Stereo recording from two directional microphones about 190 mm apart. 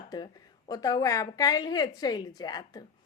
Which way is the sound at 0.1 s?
20° left (ahead or behind).